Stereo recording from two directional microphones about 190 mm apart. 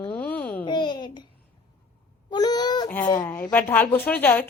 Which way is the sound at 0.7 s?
25° left (ahead or behind).